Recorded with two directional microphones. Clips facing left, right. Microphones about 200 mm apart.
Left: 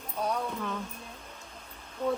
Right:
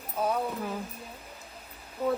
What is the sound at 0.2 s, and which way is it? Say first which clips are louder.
Speech: right 3 dB; 5° right (ahead or behind).